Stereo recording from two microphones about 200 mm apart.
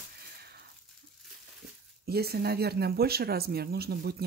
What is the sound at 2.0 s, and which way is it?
Speech, 50° right (ahead or behind).